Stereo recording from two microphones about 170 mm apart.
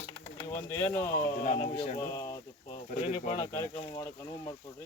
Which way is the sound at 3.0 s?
35° left (ahead or behind).